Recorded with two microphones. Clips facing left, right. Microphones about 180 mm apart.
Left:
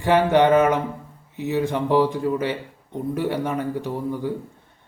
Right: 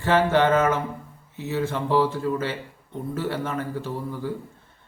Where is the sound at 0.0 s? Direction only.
15° left (ahead or behind).